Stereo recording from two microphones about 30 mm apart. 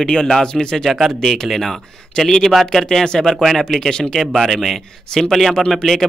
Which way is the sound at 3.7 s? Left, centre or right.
Centre.